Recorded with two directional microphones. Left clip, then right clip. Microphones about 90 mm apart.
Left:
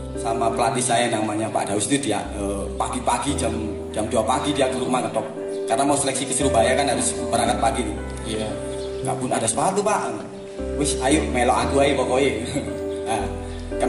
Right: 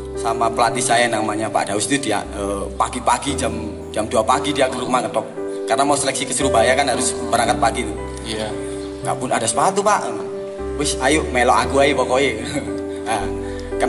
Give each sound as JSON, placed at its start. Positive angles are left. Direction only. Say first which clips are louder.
{"t": 0.2, "sound": "a man's voice", "louder": "right 4 dB", "side_deg": -20}
{"t": 9.0, "sound": "a man's voice", "louder": "right 4 dB", "side_deg": -20}